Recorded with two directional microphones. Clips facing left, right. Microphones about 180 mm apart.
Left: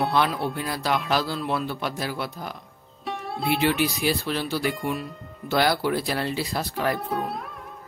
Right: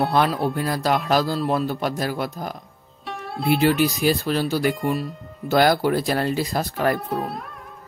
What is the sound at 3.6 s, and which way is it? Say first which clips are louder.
Speech: right 5 dB; 40° right (ahead or behind).